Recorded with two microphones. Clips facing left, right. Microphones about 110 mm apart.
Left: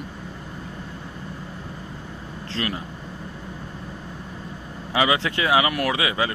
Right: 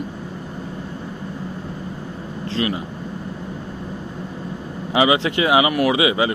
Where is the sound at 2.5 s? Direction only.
10° right (ahead or behind).